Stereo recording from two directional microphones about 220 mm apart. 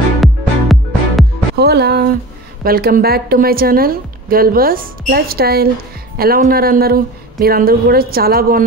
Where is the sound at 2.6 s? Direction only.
40° right (ahead or behind).